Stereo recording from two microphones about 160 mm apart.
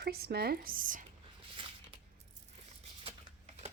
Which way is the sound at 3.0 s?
35° right (ahead or behind).